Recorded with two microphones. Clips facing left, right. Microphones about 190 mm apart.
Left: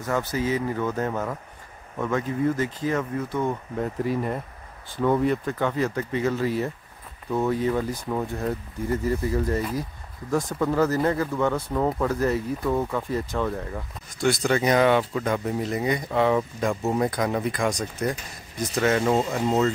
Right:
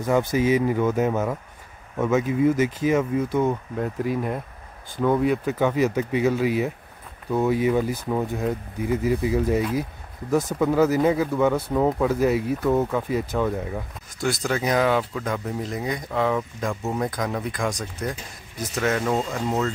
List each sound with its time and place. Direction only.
0.0 s speech: 15° right (ahead or behind); by 19.1 s centre (ahead or behind)
19.1 s speech: 20° left (ahead or behind)